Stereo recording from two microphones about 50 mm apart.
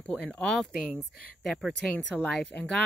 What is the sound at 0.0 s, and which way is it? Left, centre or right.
Speech, left.